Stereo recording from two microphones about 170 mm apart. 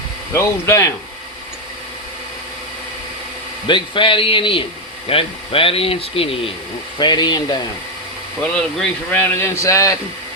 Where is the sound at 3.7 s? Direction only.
30° left (ahead or behind).